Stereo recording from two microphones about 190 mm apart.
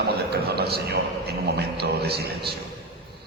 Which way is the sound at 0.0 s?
60° right (ahead or behind).